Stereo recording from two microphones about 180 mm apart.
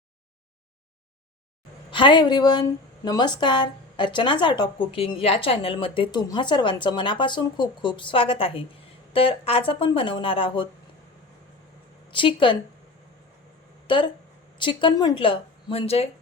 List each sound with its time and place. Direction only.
1.9 s a woman's voice: 25° left (ahead or behind)
12.1 s a woman's voice: 25° left (ahead or behind)
13.8 s a woman's voice: 25° left (ahead or behind)